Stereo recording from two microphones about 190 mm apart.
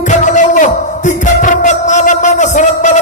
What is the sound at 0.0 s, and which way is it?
Music, 40° left (ahead or behind).